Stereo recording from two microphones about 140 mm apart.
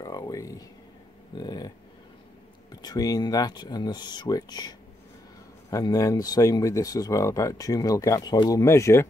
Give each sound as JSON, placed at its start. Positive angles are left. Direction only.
{"t": 0.0, "sound": "a sound", "side_deg": 25}
{"t": 1.4, "sound": "speech", "side_deg": 30}
{"t": 2.8, "sound": "speech", "side_deg": 25}